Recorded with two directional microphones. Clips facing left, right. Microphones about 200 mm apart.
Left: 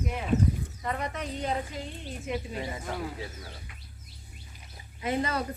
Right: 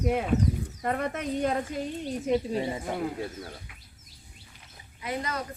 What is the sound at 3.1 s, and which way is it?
Speech, 55° right (ahead or behind).